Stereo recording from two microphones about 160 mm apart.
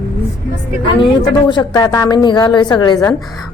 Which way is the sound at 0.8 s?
30° left (ahead or behind).